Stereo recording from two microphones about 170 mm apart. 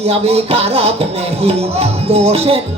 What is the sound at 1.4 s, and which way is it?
Speech, 35° right (ahead or behind).